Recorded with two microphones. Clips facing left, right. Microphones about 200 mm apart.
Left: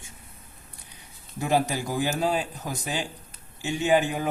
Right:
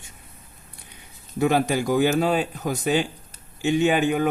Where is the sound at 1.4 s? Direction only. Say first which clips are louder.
Right 4 dB; 70° right (ahead or behind).